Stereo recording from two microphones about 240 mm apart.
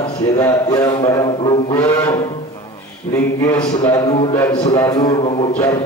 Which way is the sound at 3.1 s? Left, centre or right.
Centre.